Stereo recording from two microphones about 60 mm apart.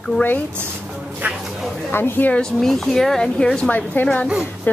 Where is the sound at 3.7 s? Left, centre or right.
Left.